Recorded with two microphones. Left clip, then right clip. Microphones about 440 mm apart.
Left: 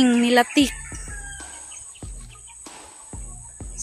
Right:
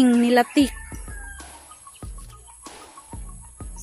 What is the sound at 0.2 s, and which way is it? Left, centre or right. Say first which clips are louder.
Speech: even; right.